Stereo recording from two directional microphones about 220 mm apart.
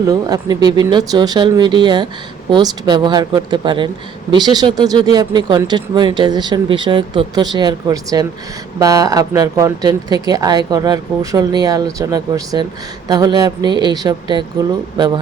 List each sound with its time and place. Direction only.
0.0 s speech: 15° right (ahead or behind)